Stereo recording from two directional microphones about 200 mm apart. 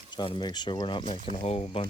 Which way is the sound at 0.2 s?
25° left (ahead or behind).